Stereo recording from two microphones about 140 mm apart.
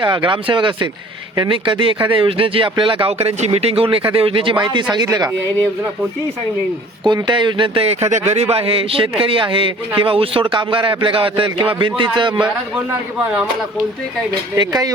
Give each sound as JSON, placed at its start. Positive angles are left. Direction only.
{"t": 0.0, "sound": "a man's voice", "side_deg": -35}
{"t": 7.0, "sound": "a man's voice", "side_deg": -30}
{"t": 14.5, "sound": "speech", "side_deg": -25}